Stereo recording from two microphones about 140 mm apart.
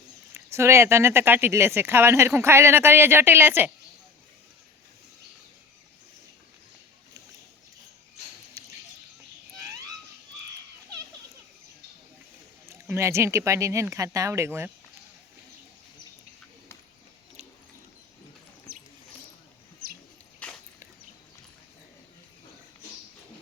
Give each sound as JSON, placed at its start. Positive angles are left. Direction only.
{"t": 0.3, "sound": "speech", "side_deg": -20}
{"t": 12.6, "sound": "speech", "side_deg": -20}
{"t": 20.4, "sound": "a sound", "side_deg": 10}